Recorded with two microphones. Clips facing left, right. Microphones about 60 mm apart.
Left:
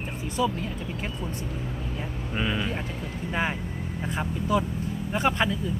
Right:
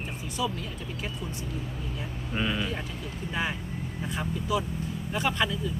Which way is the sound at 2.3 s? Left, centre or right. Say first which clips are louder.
Left 1 dB; centre.